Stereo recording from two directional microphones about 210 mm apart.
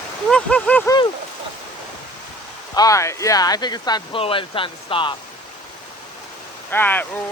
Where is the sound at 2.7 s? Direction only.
15° left (ahead or behind).